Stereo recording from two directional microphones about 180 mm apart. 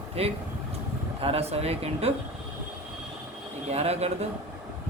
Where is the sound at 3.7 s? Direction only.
35° right (ahead or behind).